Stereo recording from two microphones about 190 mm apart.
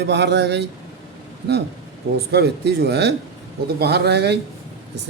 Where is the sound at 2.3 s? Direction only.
60° right (ahead or behind).